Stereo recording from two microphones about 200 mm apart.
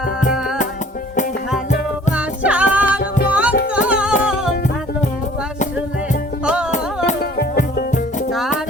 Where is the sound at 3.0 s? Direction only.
50° left (ahead or behind).